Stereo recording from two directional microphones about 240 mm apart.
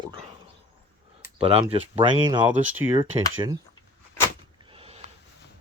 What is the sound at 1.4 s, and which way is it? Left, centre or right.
Speech, right.